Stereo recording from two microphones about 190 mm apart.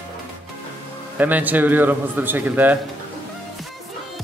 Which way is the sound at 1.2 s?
10° right (ahead or behind).